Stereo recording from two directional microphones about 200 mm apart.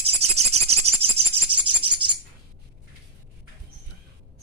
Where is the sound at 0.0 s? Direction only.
30° right (ahead or behind).